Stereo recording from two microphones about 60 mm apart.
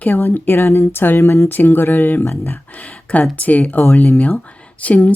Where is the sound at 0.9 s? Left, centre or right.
Left.